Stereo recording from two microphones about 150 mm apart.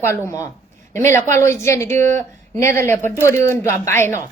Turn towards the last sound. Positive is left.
turn(degrees=15)  # may be behind; listen again after turning